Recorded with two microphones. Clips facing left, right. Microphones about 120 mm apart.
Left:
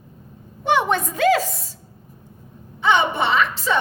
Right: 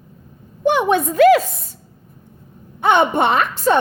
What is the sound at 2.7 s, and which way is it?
A woman's voice, 50° right (ahead or behind).